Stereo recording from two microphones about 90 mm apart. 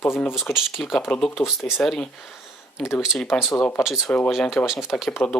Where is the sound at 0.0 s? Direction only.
25° left (ahead or behind).